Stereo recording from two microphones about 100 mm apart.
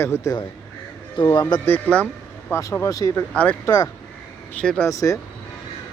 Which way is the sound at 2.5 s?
30° left (ahead or behind).